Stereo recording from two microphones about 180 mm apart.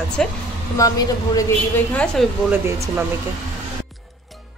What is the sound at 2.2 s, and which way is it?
Speech, centre (ahead or behind).